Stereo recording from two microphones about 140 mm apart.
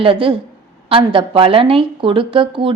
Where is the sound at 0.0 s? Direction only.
40° right (ahead or behind).